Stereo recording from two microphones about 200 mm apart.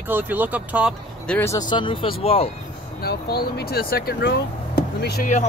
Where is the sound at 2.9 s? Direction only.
50° left (ahead or behind).